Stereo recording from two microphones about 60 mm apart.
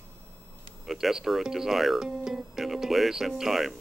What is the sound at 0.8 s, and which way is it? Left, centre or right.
Speech, centre.